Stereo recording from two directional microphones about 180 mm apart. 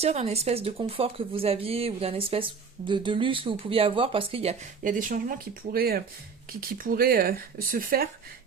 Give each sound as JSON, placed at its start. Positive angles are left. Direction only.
{"t": 0.0, "sound": "speech", "side_deg": -35}
{"t": 4.8, "sound": "speech", "side_deg": -50}